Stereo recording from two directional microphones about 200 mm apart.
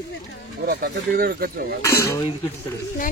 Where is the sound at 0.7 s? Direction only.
50° right (ahead or behind).